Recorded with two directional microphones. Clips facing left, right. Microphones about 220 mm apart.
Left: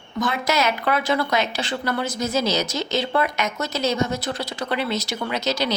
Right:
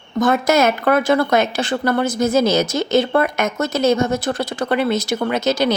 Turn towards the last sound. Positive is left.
turn(degrees=-50)  # may be behind; listen again after turning